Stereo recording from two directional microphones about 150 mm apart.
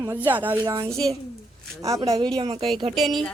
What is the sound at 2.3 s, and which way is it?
Speech, 40° right (ahead or behind).